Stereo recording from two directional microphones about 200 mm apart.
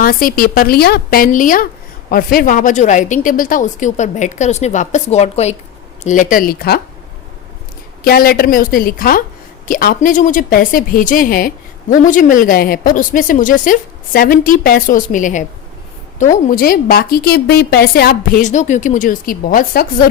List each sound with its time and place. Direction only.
0.0 s a woman's voice: 45° left (ahead or behind)
8.0 s a woman's voice: 50° left (ahead or behind)